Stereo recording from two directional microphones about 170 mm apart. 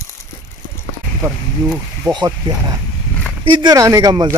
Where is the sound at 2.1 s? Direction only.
25° right (ahead or behind).